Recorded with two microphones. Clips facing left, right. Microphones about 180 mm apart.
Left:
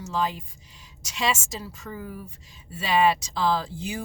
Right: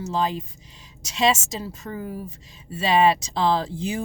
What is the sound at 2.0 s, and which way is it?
Speech, 30° right (ahead or behind).